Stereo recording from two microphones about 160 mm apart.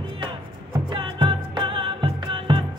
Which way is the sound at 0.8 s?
30° right (ahead or behind).